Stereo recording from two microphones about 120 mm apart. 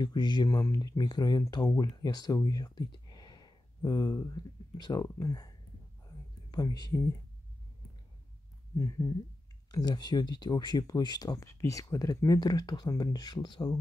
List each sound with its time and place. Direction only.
0.0 s speech: 35° left (ahead or behind)
6.5 s speech: 35° left (ahead or behind)
8.7 s a sound: 30° left (ahead or behind)
9.7 s speech: 35° left (ahead or behind)